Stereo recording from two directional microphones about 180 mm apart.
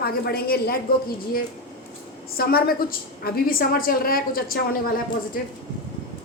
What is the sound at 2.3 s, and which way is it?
A woman's voice, 55° left (ahead or behind).